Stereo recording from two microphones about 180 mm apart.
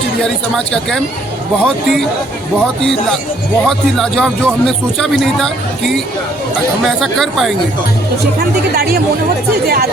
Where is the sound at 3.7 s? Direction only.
Centre (ahead or behind).